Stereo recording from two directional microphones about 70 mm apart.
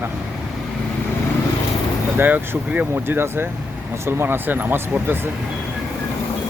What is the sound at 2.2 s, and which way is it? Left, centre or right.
Speech, right.